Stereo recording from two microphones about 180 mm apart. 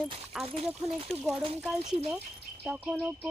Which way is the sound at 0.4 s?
30° right (ahead or behind).